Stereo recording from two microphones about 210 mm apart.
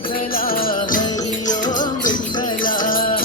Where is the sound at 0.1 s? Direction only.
45° left (ahead or behind).